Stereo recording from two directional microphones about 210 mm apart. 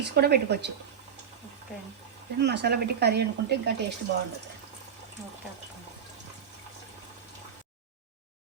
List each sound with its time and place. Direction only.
0.0 s speech: 50° right (ahead or behind)
2.4 s speech: 50° right (ahead or behind)